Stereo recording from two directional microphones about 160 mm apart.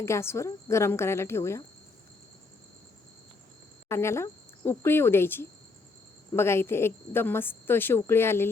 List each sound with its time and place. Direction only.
0.0 s a woman's voice: 15° left (ahead or behind)
3.8 s a woman's voice: 15° left (ahead or behind)